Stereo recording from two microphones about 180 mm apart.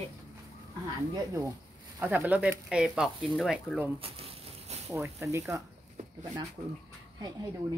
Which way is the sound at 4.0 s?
35° right (ahead or behind).